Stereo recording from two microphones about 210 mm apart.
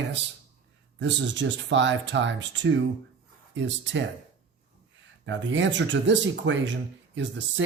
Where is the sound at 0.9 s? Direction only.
60° right (ahead or behind).